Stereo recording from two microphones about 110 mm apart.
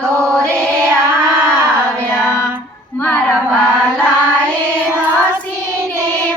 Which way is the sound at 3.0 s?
10° left (ahead or behind).